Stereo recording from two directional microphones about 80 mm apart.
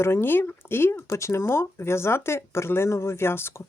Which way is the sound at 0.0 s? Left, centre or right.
Left.